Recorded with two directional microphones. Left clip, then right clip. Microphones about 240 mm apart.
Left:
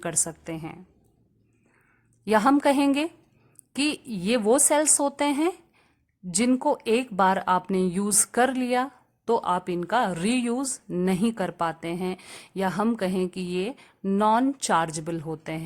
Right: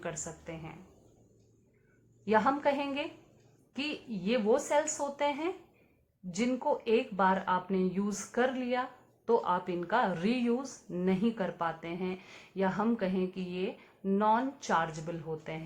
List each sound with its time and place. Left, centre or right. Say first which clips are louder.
0.0 s speech: left 9 dB; left
2.2 s speech: left 7 dB; left